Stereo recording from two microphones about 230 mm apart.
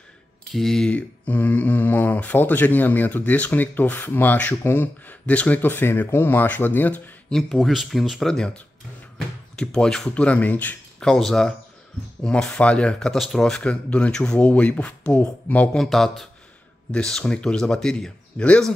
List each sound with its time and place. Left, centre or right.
0.5 s speech: centre